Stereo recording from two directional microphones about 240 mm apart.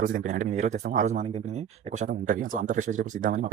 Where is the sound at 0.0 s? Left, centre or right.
Right.